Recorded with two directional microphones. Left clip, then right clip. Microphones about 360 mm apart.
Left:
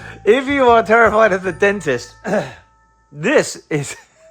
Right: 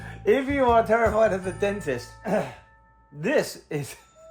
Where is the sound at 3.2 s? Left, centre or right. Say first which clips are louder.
Left 9 dB; left.